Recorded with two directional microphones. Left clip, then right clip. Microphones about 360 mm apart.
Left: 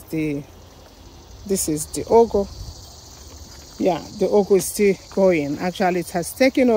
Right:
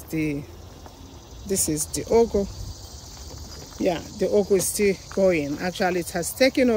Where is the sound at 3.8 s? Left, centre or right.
Centre.